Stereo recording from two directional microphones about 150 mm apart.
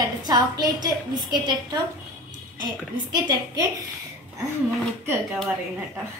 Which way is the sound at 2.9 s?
30° right (ahead or behind).